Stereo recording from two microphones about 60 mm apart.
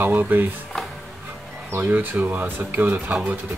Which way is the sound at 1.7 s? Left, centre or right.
Right.